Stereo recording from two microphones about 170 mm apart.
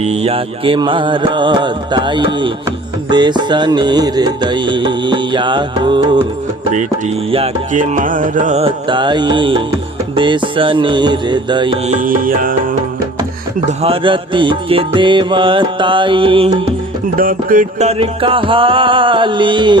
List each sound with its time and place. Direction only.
0.0 s music: 40° right (ahead or behind)
7.3 s music: 35° right (ahead or behind)
7.7 s music: 50° right (ahead or behind); by 11.9 s 30° right (ahead or behind)
12.0 s music: 55° right (ahead or behind)
13.7 s music: 35° right (ahead or behind)
17.2 s music: 55° right (ahead or behind); by 19.7 s 30° right (ahead or behind)